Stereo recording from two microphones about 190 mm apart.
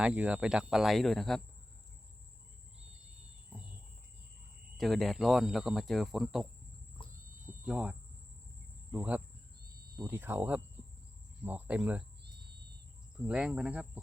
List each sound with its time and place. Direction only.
0.0 s speech: 5° right (ahead or behind)
4.8 s speech: centre (ahead or behind)
7.0 s a sound: 25° left (ahead or behind)
7.6 s cricket: 5° right (ahead or behind)
10.0 s speech: 10° right (ahead or behind)
13.1 s speech: 5° right (ahead or behind)